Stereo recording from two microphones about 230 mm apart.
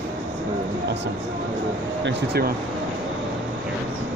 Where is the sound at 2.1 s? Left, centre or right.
Right.